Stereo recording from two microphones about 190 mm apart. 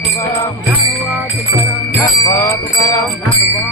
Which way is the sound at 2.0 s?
15° left (ahead or behind).